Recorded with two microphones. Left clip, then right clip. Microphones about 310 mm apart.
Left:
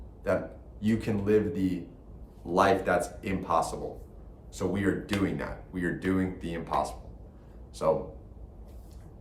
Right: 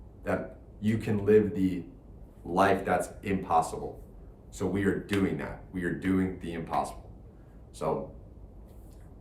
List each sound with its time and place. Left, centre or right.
0.3 s speech: centre